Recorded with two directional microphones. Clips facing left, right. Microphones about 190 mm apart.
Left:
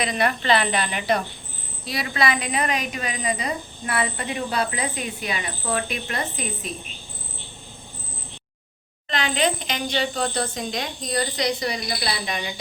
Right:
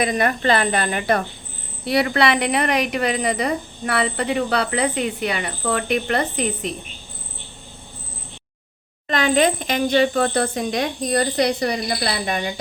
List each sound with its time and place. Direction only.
0.0 s speech: 45° right (ahead or behind)
1.8 s a woman's voice: 65° right (ahead or behind)
9.0 s speech: 50° right (ahead or behind)